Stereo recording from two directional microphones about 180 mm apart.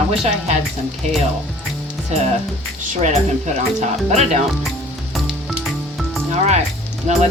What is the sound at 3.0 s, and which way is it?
Speech, 40° right (ahead or behind).